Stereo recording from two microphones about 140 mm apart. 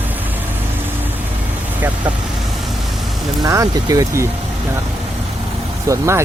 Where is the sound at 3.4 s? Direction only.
25° right (ahead or behind).